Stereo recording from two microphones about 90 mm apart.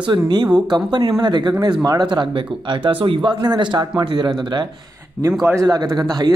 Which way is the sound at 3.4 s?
55° right (ahead or behind).